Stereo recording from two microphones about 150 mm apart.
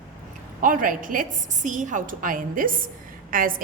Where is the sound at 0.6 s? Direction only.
65° right (ahead or behind).